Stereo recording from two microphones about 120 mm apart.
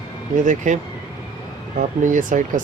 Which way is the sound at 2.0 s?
90° right.